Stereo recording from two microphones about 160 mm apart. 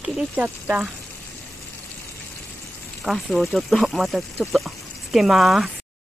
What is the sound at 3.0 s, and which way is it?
Speech, centre (ahead or behind).